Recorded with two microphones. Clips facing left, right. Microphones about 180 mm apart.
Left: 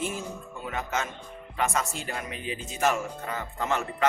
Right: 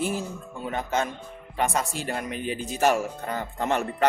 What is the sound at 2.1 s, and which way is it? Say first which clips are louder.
Speech: right 5 dB; 50° right (ahead or behind).